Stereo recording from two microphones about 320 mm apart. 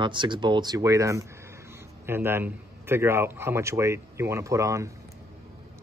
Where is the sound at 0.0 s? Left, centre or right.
Centre.